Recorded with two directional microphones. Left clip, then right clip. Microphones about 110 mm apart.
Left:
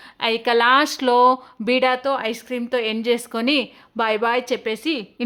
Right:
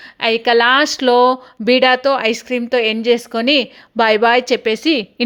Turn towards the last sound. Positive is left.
turn(degrees=-35)  # may be behind; listen again after turning